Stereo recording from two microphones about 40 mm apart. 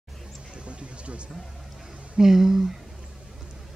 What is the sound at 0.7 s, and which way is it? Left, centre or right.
Music, right.